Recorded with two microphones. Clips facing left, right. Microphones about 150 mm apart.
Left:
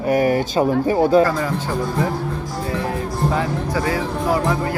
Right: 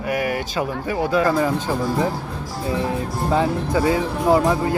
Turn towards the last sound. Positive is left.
turn(degrees=-20)  # may be behind; listen again after turning